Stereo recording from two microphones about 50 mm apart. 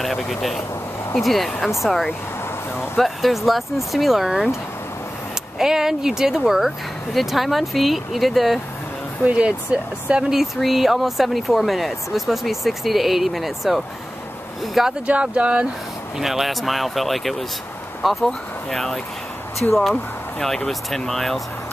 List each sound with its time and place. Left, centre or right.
0.0 s speech: centre
3.0 s speech: centre
5.6 s speech: centre
9.2 s speech: right
10.3 s speech: centre
15.0 s speech: right
16.2 s speech: centre